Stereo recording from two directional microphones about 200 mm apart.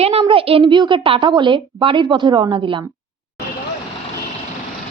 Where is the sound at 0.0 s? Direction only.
30° right (ahead or behind).